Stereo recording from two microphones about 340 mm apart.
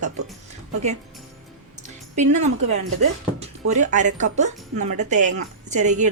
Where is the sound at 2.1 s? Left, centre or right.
Centre.